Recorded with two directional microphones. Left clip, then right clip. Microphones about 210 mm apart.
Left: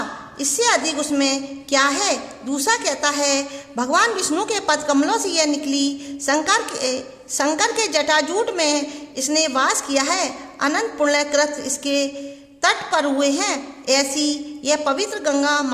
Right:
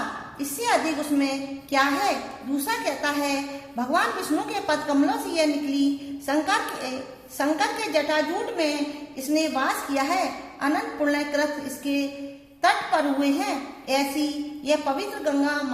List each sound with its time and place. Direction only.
0.3 s a woman's voice: 45° left (ahead or behind)